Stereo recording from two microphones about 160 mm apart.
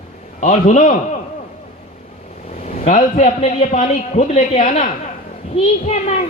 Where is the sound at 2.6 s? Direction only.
45° left (ahead or behind).